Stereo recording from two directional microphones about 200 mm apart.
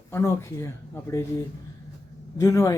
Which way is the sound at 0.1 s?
15° left (ahead or behind).